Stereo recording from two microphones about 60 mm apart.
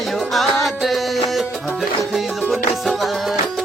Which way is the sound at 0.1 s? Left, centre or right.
Centre.